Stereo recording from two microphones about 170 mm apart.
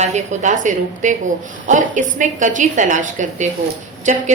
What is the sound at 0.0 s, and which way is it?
A woman's voice, 45° right (ahead or behind).